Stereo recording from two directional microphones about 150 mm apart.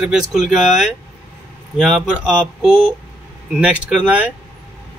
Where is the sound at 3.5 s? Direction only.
5° right (ahead or behind).